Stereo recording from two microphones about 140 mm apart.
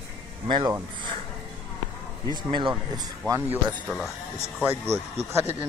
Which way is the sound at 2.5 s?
30° right (ahead or behind).